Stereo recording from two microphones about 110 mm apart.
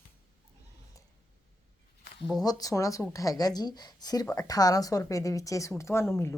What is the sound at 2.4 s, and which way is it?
A woman's voice, 35° left (ahead or behind).